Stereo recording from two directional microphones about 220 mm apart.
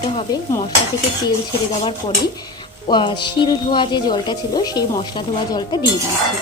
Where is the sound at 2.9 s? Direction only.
20° left (ahead or behind).